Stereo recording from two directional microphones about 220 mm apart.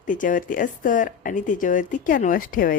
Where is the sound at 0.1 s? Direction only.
35° left (ahead or behind).